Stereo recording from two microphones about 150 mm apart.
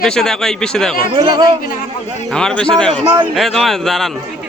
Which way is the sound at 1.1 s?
30° right (ahead or behind).